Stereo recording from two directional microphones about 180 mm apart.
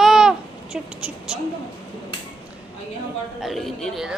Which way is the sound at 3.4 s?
Centre (ahead or behind).